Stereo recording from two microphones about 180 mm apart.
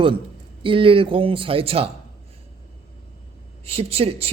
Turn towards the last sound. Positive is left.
turn(degrees=-35)  # may be behind; listen again after turning